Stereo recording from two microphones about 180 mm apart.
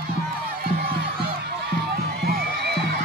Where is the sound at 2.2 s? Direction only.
65° right (ahead or behind).